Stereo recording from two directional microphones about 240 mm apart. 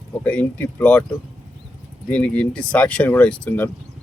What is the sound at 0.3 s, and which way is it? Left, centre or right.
Speech, centre.